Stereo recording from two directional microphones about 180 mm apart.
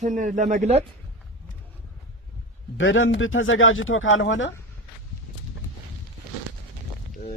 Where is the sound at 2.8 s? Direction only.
90° left.